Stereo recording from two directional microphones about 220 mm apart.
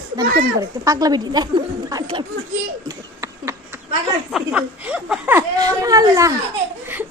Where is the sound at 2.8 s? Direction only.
10° right (ahead or behind).